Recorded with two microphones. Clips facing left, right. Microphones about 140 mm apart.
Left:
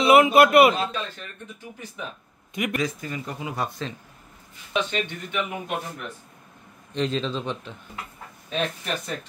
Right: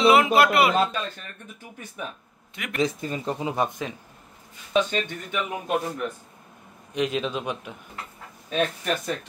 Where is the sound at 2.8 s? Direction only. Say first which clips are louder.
Right 3 dB; 30° right (ahead or behind).